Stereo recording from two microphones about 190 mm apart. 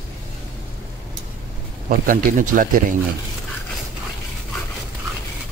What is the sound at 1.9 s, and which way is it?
Speech, 45° right (ahead or behind).